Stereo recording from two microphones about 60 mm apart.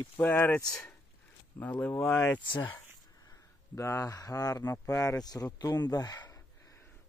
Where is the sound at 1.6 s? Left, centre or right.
Left.